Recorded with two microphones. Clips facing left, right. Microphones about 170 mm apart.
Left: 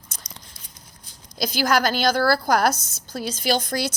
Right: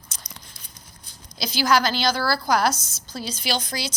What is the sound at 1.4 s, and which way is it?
A woman's voice, 50° left (ahead or behind).